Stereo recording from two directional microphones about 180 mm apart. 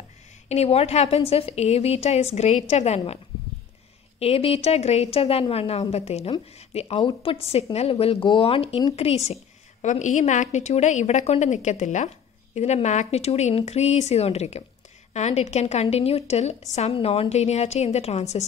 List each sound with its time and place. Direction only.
0.5 s a woman's voice: 35° left (ahead or behind)
4.2 s a woman's voice: 35° left (ahead or behind)